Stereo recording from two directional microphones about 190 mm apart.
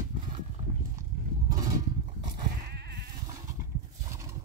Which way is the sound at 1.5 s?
20° right (ahead or behind).